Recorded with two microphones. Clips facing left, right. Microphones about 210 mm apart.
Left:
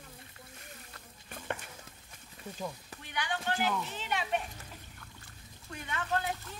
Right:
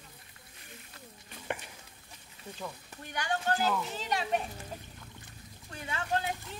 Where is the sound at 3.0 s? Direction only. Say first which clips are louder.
Right 3 dB; 45° right (ahead or behind).